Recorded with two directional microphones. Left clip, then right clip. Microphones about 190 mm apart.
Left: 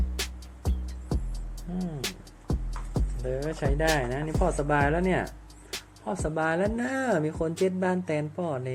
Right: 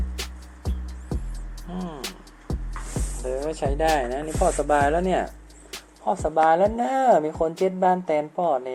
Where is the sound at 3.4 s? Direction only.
20° left (ahead or behind).